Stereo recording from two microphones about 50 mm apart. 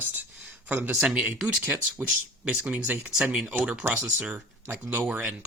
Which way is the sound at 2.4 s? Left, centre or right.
Right.